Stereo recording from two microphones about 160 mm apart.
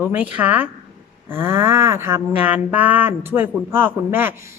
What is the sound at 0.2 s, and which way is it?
Speech, 10° right (ahead or behind).